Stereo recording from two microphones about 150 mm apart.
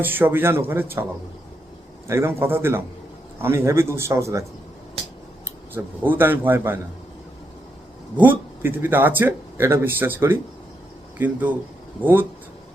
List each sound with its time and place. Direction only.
0.0 s speech: 15° right (ahead or behind)
2.0 s speech: 15° right (ahead or behind)
5.5 s speech: 15° right (ahead or behind)
8.1 s speech: 10° right (ahead or behind)